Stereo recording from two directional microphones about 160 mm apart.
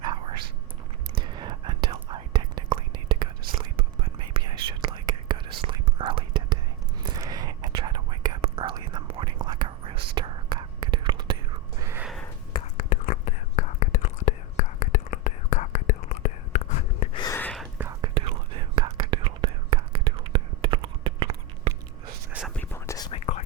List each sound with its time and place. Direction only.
0.0 s whispering: 30° right (ahead or behind)
11.8 s gasp: 15° right (ahead or behind)
12.7 s whispering: 55° left (ahead or behind)
17.3 s whispering: 5° left (ahead or behind)
18.0 s whispering: 30° right (ahead or behind)
22.3 s whispering: 5° right (ahead or behind)
22.5 s whispering: 10° left (ahead or behind)
23.1 s whispering: 40° left (ahead or behind)